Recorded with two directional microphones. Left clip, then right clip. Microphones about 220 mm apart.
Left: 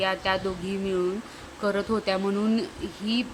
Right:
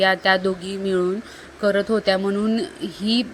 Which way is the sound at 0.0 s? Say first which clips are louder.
Right 8 dB; 20° right (ahead or behind).